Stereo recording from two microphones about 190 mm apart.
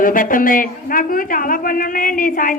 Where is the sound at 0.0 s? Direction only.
45° left (ahead or behind).